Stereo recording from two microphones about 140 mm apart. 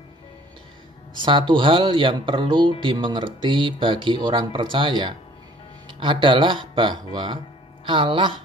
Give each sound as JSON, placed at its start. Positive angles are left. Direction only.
{"t": 1.1, "sound": "speech", "side_deg": -35}